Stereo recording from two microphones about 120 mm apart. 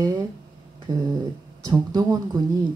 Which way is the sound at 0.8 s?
35° right (ahead or behind).